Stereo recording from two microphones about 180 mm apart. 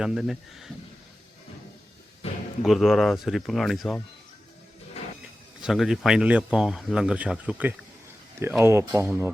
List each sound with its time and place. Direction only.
0.0 s speech: centre (ahead or behind)
2.6 s speech: centre (ahead or behind)
5.0 s a sound: 35° left (ahead or behind)
5.6 s speech: centre (ahead or behind)